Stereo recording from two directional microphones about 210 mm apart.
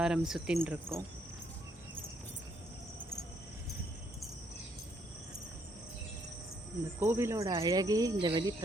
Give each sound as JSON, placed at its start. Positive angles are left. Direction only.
{"t": 0.0, "sound": "speech", "side_deg": -5}
{"t": 7.0, "sound": "speech", "side_deg": -10}